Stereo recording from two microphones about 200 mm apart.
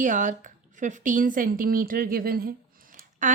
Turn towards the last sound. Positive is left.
turn(degrees=-40)  # may be behind; listen again after turning